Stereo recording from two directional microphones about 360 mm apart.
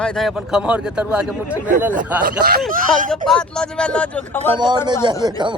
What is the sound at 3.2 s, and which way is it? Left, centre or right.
A man's voice, centre.